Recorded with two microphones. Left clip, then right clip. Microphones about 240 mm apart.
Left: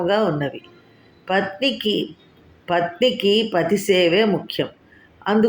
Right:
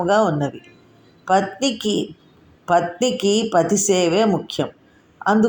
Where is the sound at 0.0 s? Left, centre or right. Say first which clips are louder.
Right 2 dB; right.